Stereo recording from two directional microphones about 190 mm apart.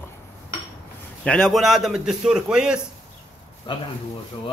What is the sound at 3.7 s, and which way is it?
Speech, 25° left (ahead or behind).